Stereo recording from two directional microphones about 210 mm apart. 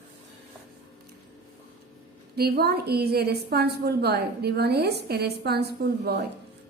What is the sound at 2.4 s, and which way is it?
A woman's voice, 50° right (ahead or behind).